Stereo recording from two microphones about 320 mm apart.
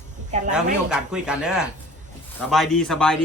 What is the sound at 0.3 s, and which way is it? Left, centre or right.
Speech, right.